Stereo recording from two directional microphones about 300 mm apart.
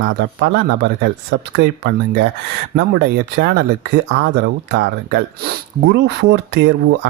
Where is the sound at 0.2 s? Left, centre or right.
Right.